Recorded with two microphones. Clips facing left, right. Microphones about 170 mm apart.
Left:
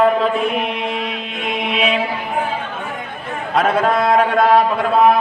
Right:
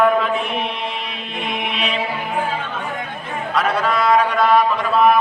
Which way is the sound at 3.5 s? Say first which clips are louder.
Left 4 dB; 50° left (ahead or behind).